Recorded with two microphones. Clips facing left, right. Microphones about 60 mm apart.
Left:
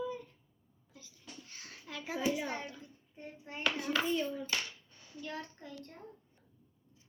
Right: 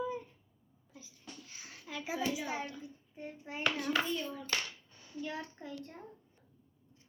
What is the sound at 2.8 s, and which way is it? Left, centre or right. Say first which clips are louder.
Child singing: right 4 dB; centre.